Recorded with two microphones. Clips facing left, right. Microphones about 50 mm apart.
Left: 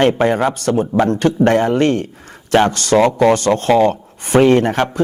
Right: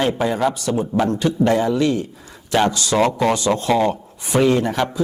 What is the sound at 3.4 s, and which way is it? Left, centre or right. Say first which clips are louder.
A man's voice: left 5 dB; left.